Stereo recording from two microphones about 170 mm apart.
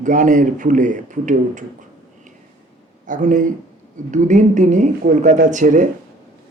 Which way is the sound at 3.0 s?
50° right (ahead or behind).